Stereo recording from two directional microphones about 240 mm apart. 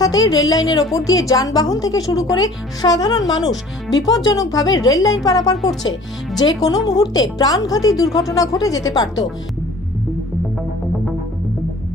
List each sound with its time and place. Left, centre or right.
0.0 s a woman's voice: centre
6.3 s a woman's voice: centre